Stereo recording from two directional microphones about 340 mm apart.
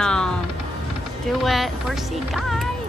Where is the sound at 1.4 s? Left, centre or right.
Centre.